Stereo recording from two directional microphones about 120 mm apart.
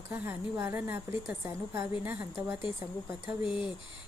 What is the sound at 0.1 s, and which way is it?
A woman's voice, 20° right (ahead or behind).